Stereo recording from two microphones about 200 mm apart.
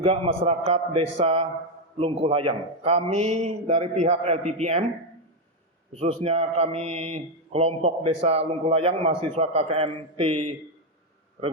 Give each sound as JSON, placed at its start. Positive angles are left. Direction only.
{"t": 0.0, "sound": "a man's voice", "side_deg": -30}
{"t": 5.9, "sound": "a man's voice", "side_deg": -30}